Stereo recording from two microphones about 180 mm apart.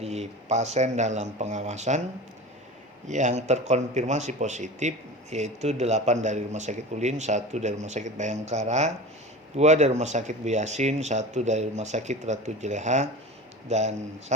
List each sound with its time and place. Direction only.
0.0 s speech: 35° right (ahead or behind)
3.1 s speech: 40° right (ahead or behind)